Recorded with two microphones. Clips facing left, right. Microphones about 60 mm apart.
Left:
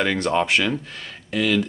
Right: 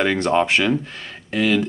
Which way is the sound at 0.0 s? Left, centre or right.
Right.